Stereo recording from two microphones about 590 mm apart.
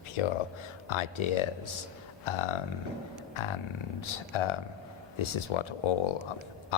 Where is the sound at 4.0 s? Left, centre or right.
Left.